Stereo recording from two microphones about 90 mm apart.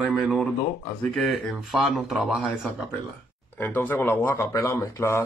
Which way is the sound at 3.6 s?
20° left (ahead or behind).